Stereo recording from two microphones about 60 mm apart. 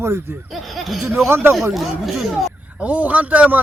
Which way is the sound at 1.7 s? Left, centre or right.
Centre.